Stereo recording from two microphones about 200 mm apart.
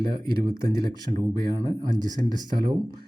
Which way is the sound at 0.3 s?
25° right (ahead or behind).